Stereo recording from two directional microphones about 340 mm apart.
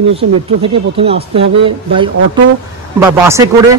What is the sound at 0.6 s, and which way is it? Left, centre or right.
Speech, centre.